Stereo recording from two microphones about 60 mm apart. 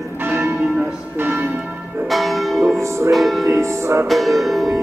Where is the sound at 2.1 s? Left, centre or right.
Centre.